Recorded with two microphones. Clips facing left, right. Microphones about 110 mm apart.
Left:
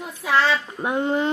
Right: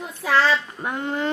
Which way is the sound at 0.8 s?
15° left (ahead or behind).